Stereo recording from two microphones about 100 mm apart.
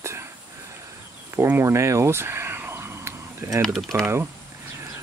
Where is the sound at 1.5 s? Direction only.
25° right (ahead or behind).